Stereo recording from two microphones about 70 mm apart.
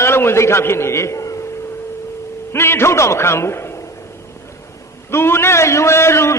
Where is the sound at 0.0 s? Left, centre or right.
Left.